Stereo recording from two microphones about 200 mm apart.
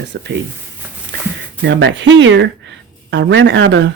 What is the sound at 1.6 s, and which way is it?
Speech, 65° right (ahead or behind).